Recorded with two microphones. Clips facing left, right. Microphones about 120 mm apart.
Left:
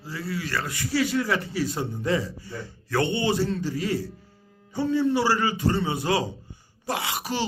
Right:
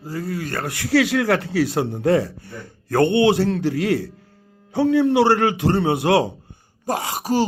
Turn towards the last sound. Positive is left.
turn(degrees=-40)  # may be behind; listen again after turning